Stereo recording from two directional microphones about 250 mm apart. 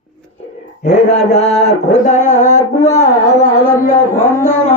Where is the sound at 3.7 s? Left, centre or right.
Centre.